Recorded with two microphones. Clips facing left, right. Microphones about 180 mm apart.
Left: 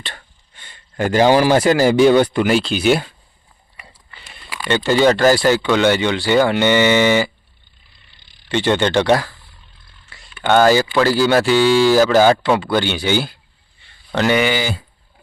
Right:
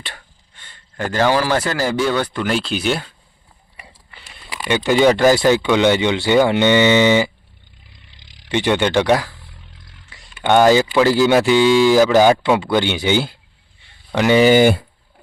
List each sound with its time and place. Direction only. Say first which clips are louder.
0.5 s speech: left 4 dB; 15° left (ahead or behind)
2.5 s speech: left 4 dB; centre (ahead or behind)
4.6 s speech: even; 15° right (ahead or behind)
8.0 s a sound: right 6 dB; 90° right
8.4 s speech: even; 15° right (ahead or behind)
9.6 s roar: right 5 dB; 90° right
10.1 s a sound: even; 15° right (ahead or behind)
11.0 s speech: right 1 dB; 20° right (ahead or behind)
14.3 s speech: right 10 dB; 40° right (ahead or behind)
14.6 s speech: right 11 dB; 60° right (ahead or behind)